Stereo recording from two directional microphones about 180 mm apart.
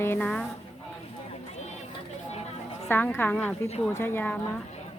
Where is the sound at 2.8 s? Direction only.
15° left (ahead or behind).